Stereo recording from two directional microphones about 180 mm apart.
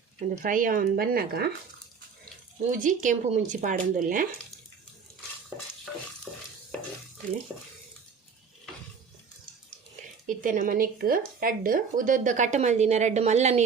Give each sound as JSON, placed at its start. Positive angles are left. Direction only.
{"t": 0.2, "sound": "speech", "side_deg": -45}
{"t": 2.6, "sound": "speech", "side_deg": -45}
{"t": 6.3, "sound": "stir", "side_deg": 0}
{"t": 10.2, "sound": "speech", "side_deg": -50}